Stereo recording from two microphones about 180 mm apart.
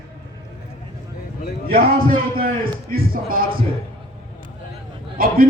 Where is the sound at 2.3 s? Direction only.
55° right (ahead or behind).